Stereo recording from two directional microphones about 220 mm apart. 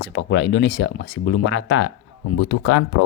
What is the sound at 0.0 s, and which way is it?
Speech, 55° left (ahead or behind).